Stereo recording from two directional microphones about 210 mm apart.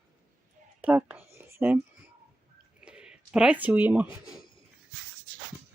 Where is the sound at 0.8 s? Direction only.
5° right (ahead or behind).